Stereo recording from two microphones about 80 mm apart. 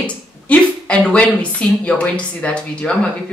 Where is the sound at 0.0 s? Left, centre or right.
Centre.